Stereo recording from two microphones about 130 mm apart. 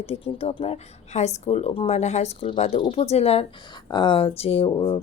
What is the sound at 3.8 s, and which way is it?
A woman's voice, 35° left (ahead or behind).